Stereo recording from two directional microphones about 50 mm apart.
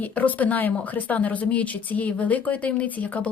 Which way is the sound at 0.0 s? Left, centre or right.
Left.